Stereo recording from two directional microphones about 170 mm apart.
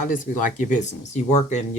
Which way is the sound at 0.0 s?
50° left (ahead or behind).